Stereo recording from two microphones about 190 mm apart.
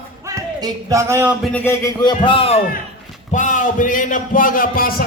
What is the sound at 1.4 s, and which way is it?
A man's voice, 10° left (ahead or behind).